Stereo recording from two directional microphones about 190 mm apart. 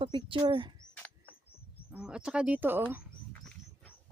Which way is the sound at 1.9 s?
5° right (ahead or behind).